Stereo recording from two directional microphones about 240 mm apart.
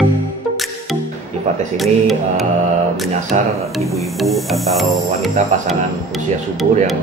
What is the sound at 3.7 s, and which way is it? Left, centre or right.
Speech, centre.